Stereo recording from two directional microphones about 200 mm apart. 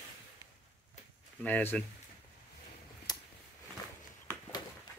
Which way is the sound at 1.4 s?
10° left (ahead or behind).